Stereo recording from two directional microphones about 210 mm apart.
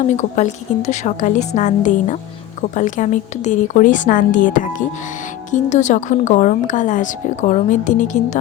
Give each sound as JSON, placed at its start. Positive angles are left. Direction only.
{"t": 0.2, "sound": "speech", "side_deg": 35}